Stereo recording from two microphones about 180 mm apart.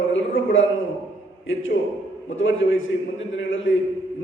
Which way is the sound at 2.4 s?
90° left.